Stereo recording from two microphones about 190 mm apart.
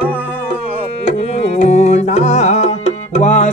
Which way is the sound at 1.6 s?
35° left (ahead or behind).